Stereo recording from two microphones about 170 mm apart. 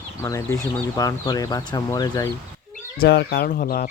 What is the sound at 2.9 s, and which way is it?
Speech, 65° left (ahead or behind).